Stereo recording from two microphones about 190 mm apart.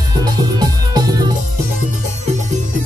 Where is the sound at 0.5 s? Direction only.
20° right (ahead or behind).